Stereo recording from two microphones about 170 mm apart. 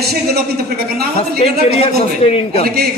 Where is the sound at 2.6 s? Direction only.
65° right (ahead or behind).